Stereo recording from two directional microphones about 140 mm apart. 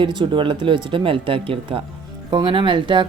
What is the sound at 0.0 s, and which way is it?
Speech, 35° right (ahead or behind).